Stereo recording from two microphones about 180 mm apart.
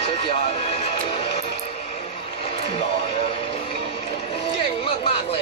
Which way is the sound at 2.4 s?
30° left (ahead or behind).